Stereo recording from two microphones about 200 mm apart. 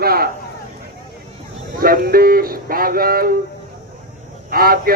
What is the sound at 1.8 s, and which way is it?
Speech, 45° right (ahead or behind).